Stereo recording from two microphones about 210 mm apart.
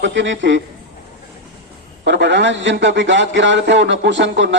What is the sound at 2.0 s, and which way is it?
A man's voice, 60° right (ahead or behind).